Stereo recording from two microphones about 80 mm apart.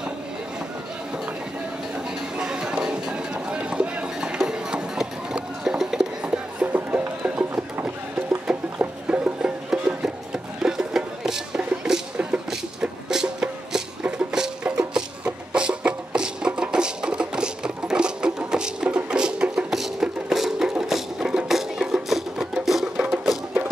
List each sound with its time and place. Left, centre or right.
2.3 s run: centre
6.7 s music: centre